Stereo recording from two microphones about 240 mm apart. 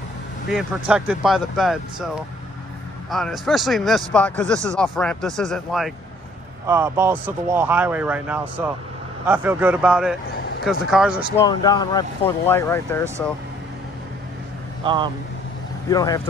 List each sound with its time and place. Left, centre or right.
0.5 s speech: centre
3.1 s speech: centre
6.7 s speech: centre
11.3 s speech: centre
15.9 s speech: centre